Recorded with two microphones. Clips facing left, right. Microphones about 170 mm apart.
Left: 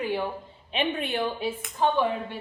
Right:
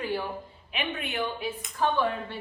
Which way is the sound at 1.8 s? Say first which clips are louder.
Left 2 dB; 15° left (ahead or behind).